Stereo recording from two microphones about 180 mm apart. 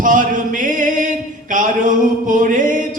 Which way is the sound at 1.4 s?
45° right (ahead or behind).